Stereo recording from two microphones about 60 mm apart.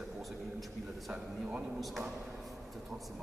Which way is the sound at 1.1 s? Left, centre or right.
Centre.